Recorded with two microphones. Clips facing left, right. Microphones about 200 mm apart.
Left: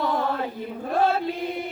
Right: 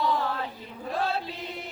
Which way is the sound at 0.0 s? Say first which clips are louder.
Left 3 dB; 50° left (ahead or behind).